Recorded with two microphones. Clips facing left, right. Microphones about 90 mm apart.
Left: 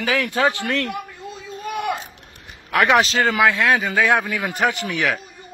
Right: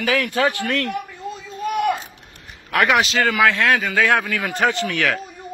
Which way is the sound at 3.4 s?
20° left (ahead or behind).